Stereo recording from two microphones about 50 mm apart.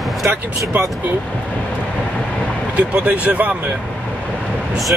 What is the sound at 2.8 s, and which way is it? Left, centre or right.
Speech, right.